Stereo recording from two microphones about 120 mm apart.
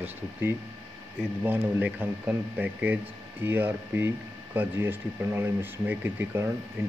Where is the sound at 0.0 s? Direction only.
15° right (ahead or behind).